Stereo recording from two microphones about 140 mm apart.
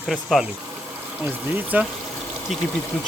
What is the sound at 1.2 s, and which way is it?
Speech, 10° right (ahead or behind).